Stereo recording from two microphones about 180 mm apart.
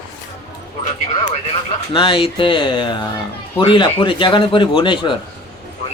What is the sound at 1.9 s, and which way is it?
A man's voice, 30° left (ahead or behind).